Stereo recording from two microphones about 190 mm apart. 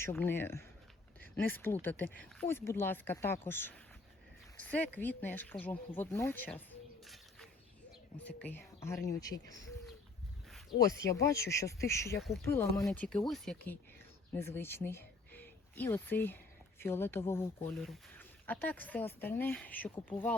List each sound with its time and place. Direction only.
0.0 s speech: 10° left (ahead or behind)
8.4 s speech: 10° left (ahead or behind)
10.8 s speech: 15° left (ahead or behind)
17.7 s speech: centre (ahead or behind)